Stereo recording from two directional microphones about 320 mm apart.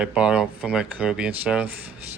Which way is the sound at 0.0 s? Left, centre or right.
Centre.